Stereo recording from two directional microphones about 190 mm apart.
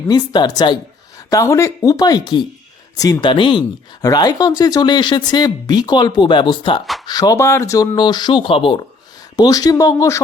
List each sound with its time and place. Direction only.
0.1 s speech: 20° left (ahead or behind)